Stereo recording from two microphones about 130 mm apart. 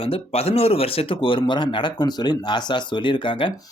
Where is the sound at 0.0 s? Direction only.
50° left (ahead or behind).